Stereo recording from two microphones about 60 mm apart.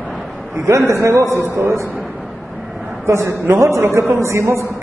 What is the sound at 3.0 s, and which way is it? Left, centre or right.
A man's voice, right.